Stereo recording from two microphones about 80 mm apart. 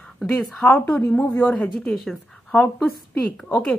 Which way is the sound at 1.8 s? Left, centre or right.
Centre.